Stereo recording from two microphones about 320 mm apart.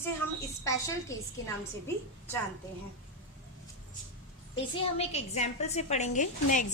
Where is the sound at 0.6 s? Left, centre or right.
Centre.